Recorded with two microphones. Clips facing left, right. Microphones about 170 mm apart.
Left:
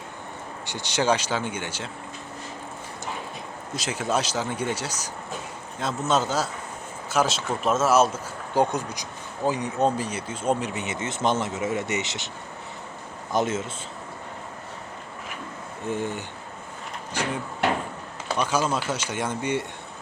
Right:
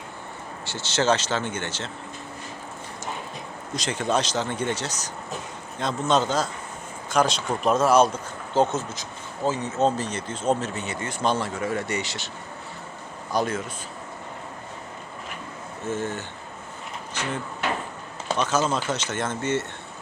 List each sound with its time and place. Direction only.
0.6 s speech: 15° left (ahead or behind)
3.8 s a man's voice: 5° left (ahead or behind)
13.3 s speech: 20° left (ahead or behind)
15.9 s speech: 15° left (ahead or behind)
18.3 s speech: 10° left (ahead or behind)